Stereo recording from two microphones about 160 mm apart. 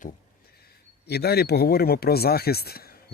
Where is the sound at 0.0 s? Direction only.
70° left (ahead or behind).